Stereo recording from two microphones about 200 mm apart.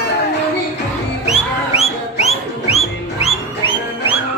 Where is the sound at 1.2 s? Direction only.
30° left (ahead or behind).